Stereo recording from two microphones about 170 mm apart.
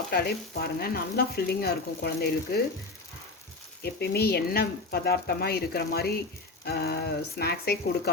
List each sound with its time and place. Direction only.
0.1 s frying: 65° left (ahead or behind)
3.8 s frying: 65° left (ahead or behind)